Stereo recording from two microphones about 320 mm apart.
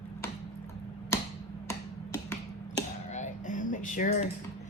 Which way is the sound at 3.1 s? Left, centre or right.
Left.